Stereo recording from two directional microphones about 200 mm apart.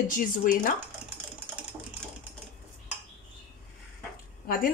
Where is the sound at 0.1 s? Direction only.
45° left (ahead or behind).